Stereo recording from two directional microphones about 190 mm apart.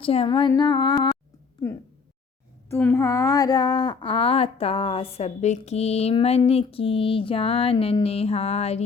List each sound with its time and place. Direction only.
0.0 s a woman's voice: 30° left (ahead or behind)
2.6 s a woman's voice: 10° left (ahead or behind); by 8.8 s 35° left (ahead or behind)